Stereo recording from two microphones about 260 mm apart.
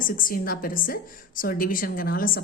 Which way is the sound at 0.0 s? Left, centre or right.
Left.